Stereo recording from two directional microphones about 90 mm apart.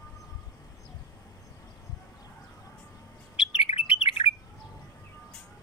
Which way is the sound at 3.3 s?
90° left.